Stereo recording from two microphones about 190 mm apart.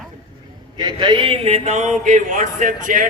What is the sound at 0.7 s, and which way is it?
A man's voice, 25° right (ahead or behind).